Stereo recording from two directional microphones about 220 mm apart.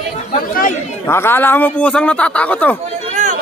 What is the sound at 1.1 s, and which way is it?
Speech, 10° left (ahead or behind).